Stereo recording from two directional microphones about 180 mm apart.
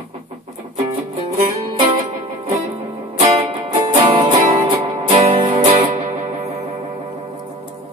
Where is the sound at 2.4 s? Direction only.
35° right (ahead or behind).